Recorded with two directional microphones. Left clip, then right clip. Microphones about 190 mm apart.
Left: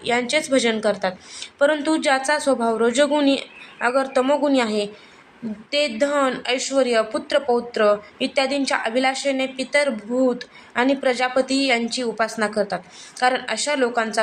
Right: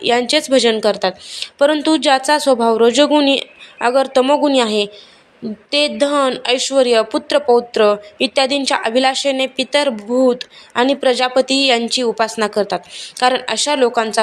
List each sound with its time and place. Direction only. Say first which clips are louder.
0.0 s speech: right 6 dB; 30° right (ahead or behind)